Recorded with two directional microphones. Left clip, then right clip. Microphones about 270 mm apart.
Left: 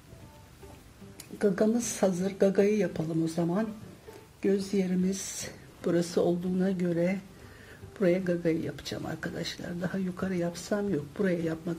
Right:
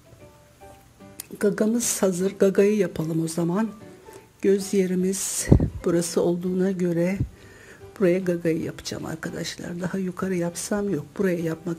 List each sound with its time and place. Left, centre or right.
1.4 s speech: right